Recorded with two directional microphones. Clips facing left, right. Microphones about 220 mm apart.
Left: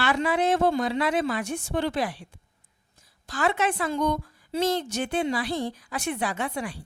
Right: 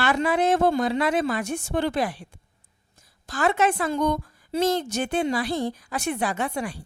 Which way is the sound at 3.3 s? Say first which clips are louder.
Right 3 dB; 45° right (ahead or behind).